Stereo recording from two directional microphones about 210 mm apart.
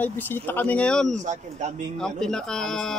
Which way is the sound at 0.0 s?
10° left (ahead or behind).